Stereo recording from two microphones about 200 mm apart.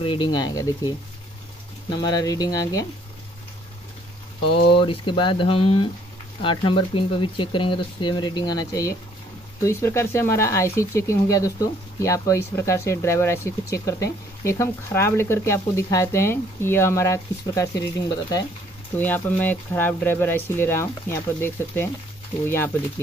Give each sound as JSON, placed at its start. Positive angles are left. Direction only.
{"t": 0.0, "sound": "speech", "side_deg": 25}
{"t": 4.6, "sound": "speech", "side_deg": 25}
{"t": 18.9, "sound": "speech", "side_deg": 10}